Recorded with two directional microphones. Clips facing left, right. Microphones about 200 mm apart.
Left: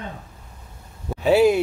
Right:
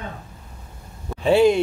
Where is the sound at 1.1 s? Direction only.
5° left (ahead or behind).